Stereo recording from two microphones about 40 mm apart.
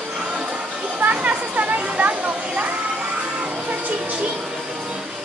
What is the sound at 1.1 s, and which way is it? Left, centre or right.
Children playing, right.